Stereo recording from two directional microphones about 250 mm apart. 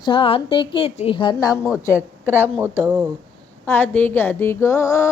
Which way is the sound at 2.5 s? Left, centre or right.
Centre.